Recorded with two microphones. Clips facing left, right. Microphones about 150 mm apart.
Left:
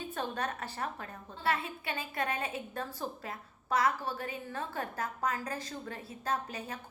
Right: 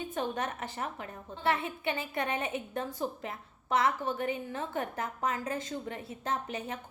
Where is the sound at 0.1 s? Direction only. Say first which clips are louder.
Right 1 dB; 20° right (ahead or behind).